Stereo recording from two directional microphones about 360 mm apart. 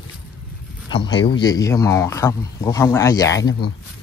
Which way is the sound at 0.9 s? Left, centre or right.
Centre.